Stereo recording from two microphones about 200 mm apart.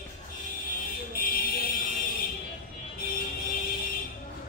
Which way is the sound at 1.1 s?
45° left (ahead or behind).